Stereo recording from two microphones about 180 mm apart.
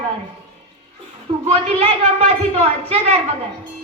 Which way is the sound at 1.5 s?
35° right (ahead or behind).